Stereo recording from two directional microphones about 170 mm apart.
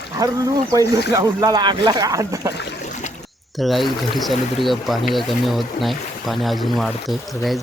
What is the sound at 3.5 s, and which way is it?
Speech, centre (ahead or behind).